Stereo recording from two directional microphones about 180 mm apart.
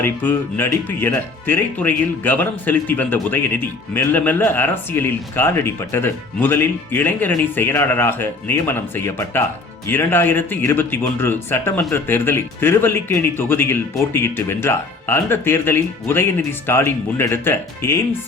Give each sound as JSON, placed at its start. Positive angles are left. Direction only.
{"t": 0.0, "sound": "speech", "side_deg": 10}